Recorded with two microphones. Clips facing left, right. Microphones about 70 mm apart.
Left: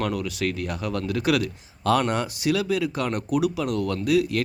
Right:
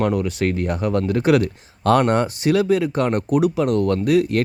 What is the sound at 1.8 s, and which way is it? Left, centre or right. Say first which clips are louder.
Speech: right 6 dB; right.